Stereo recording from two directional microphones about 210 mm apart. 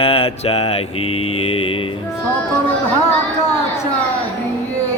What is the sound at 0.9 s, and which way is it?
Mantra, 90° left.